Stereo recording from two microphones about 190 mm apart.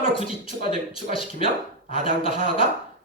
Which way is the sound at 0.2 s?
30° left (ahead or behind).